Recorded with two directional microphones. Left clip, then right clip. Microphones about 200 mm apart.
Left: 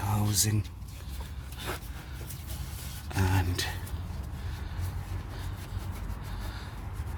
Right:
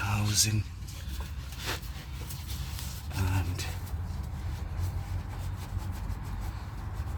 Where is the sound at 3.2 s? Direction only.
60° left (ahead or behind).